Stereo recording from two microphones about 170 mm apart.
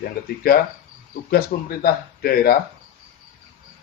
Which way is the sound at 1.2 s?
60° left (ahead or behind).